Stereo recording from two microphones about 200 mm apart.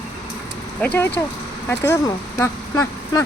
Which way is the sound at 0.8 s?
5° left (ahead or behind).